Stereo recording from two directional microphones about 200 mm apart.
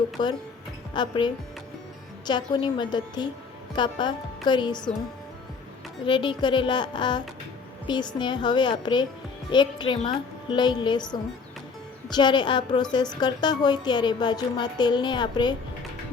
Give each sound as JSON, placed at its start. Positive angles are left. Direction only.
{"t": 0.2, "sound": "a woman's voice", "side_deg": 20}
{"t": 6.1, "sound": "a woman's voice", "side_deg": 25}